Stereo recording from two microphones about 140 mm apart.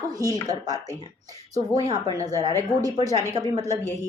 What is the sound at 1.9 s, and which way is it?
A woman's voice, 25° right (ahead or behind).